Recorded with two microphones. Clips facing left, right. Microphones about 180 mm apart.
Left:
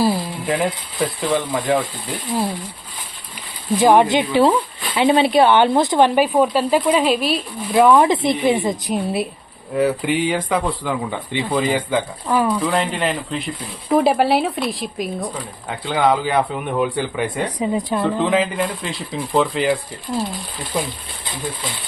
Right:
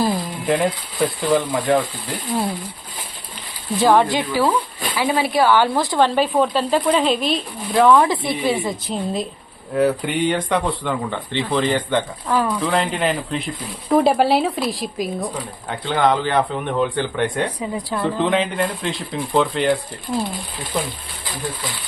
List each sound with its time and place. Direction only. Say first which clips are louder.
0.0 s speech: left 2 dB; 5° left (ahead or behind)
3.8 s speech: left 2 dB; 15° left (ahead or behind)
17.6 s speech: left 4 dB; 20° left (ahead or behind)
18.0 s speech: right 1 dB; centre (ahead or behind)